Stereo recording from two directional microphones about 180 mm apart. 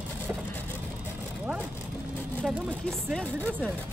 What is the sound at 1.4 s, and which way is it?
Speech, 10° right (ahead or behind).